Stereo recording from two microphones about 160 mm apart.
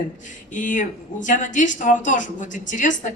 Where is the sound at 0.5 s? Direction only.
55° left (ahead or behind).